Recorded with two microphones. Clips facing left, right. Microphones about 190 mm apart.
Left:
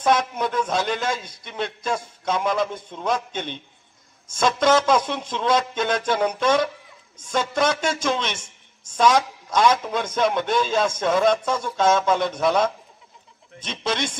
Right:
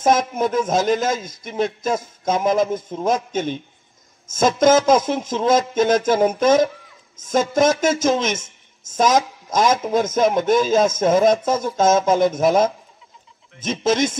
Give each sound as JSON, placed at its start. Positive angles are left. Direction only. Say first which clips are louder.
{"t": 0.3, "sound": "a man's voice", "louder": "right 5 dB", "side_deg": -45}
{"t": 8.4, "sound": "a sound", "louder": "right 3 dB", "side_deg": -20}
{"t": 9.0, "sound": "a man's voice", "louder": "right 1 dB", "side_deg": -45}